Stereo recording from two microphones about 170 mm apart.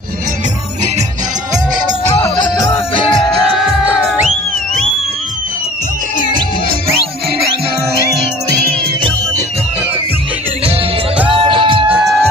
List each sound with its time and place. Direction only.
2.6 s music: 30° left (ahead or behind)
3.5 s music: 5° right (ahead or behind)
8.1 s music: 70° right (ahead or behind)
11.2 s music: 30° right (ahead or behind)
11.9 s music: 10° right (ahead or behind)